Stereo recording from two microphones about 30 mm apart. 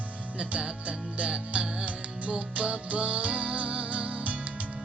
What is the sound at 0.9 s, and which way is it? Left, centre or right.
Music, right.